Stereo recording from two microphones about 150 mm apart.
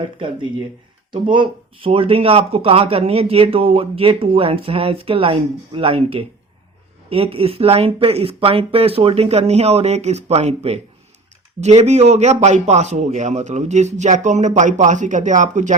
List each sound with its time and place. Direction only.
0.0 s a man's voice: 35° right (ahead or behind); by 15.7 s 55° right (ahead or behind)